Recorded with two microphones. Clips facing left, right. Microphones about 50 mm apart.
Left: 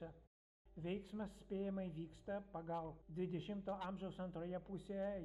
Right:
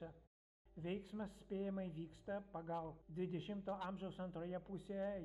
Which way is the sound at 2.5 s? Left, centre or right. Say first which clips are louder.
Even; centre.